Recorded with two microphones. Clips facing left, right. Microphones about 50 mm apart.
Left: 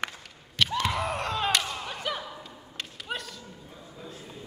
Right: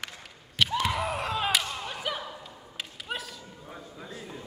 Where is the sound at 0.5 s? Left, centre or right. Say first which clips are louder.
Even; centre.